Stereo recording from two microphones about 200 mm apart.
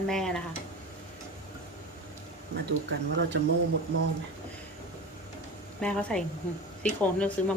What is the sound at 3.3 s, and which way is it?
Speech, 60° right (ahead or behind).